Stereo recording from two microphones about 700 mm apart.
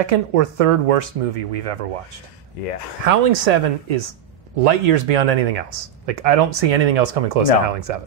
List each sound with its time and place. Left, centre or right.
0.0 s speech: right
3.1 s speech: right